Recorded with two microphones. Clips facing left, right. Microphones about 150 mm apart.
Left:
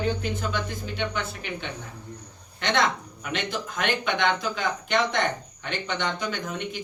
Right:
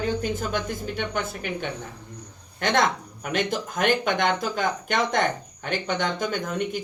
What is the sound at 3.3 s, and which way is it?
A woman's voice, 45° right (ahead or behind).